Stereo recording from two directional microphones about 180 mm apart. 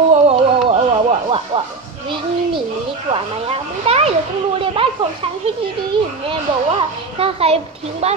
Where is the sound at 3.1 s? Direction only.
35° right (ahead or behind).